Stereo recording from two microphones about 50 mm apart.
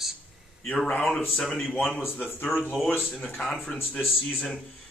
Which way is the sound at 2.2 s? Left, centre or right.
Left.